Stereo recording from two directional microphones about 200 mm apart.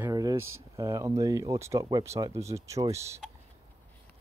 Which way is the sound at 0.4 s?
90° right.